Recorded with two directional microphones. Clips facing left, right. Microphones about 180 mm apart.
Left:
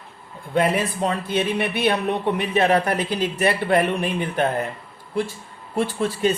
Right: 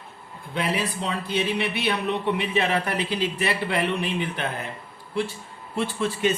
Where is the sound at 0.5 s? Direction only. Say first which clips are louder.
Left 6 dB; 50° left (ahead or behind).